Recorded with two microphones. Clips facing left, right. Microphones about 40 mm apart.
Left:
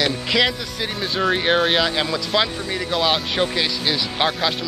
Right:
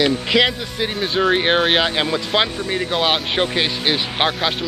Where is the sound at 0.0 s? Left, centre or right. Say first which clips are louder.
Right 3 dB; centre.